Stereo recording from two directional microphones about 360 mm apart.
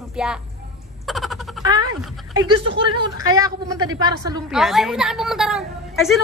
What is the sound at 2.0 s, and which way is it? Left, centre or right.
A woman's voice, centre.